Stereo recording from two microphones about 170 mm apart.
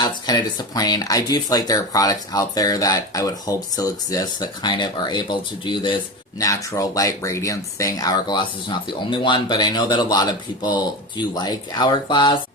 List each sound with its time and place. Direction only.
0.0 s speech: 25° left (ahead or behind)